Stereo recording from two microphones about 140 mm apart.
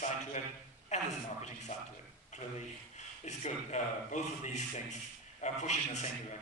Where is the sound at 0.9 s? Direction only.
60° left (ahead or behind).